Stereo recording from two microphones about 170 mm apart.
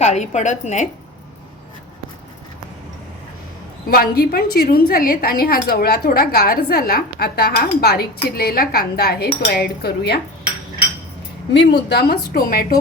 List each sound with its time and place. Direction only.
0.0 s a woman's voice: 45° left (ahead or behind)
3.8 s a woman's voice: 60° left (ahead or behind)
11.5 s a woman's voice: 85° left; by 12.8 s 60° left (ahead or behind)